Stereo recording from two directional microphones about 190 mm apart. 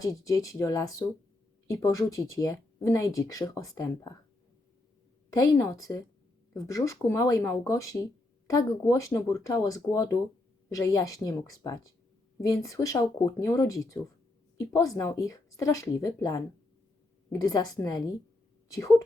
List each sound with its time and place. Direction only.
0.0 s speech: 15° left (ahead or behind)
5.4 s speech: 20° left (ahead or behind)